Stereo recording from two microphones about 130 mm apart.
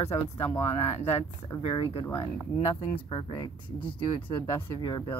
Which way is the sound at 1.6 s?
45° left (ahead or behind).